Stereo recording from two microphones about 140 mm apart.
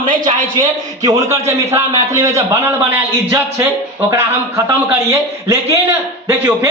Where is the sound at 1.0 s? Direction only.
25° right (ahead or behind).